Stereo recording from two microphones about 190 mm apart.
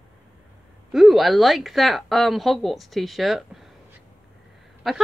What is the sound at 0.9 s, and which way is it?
Speech, centre (ahead or behind).